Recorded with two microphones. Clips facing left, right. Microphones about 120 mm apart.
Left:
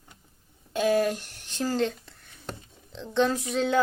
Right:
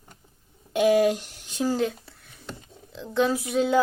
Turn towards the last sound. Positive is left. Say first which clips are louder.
# right 3 dB
turn(degrees=-5)  # may be behind; listen again after turning